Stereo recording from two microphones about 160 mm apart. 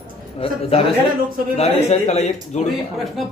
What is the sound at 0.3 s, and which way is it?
A man's voice, 40° left (ahead or behind).